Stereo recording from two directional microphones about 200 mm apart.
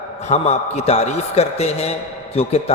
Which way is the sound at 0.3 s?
35° left (ahead or behind).